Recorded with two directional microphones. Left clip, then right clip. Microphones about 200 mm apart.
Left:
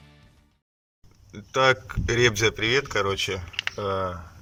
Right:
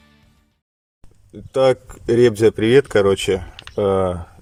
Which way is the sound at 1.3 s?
25° right (ahead or behind).